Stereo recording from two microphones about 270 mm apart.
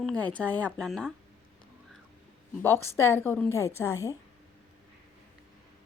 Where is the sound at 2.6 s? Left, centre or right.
Centre.